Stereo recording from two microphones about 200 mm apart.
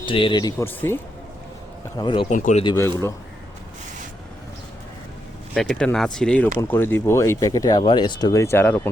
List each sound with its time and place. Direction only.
0.0 s speech: 25° left (ahead or behind)
2.0 s speech: 25° left (ahead or behind)
2.3 s speech: 40° left (ahead or behind)
2.6 s speech: 15° left (ahead or behind)
5.5 s speech: 5° left (ahead or behind)